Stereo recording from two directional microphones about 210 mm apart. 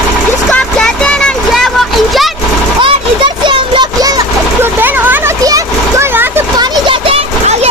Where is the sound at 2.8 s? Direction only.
25° right (ahead or behind).